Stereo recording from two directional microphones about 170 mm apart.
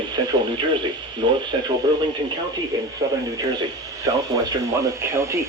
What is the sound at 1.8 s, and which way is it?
Speech, 25° right (ahead or behind).